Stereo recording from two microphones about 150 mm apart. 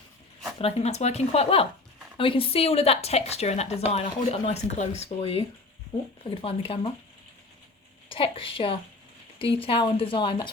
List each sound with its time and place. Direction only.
0.6 s speech: 45° left (ahead or behind)
8.1 s speech: 35° left (ahead or behind)